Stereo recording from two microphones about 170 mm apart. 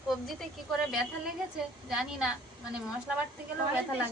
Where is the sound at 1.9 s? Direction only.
5° right (ahead or behind).